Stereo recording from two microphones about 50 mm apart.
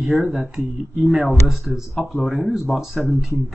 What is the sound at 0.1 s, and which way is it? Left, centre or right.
Speech, centre.